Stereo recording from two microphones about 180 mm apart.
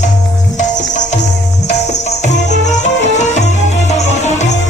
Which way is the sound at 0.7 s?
40° left (ahead or behind).